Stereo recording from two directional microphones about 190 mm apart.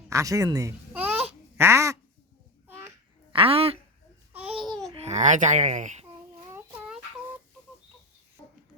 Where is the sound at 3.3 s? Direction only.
30° right (ahead or behind).